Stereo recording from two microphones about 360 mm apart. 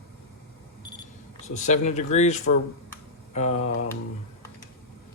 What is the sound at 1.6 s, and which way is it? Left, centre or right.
Speech, centre.